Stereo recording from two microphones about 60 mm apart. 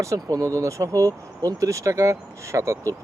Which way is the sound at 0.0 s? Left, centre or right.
Right.